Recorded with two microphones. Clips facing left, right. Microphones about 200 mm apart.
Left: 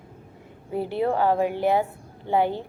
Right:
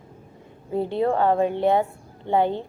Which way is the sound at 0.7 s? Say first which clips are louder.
Right 2 dB; 25° right (ahead or behind).